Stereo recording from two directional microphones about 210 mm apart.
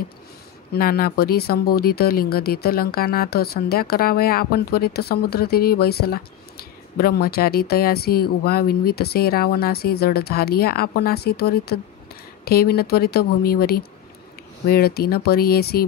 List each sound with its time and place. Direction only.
0.7 s speech: 45° left (ahead or behind)